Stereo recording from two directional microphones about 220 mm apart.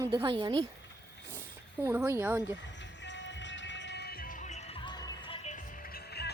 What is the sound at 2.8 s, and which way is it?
Music, 55° left (ahead or behind).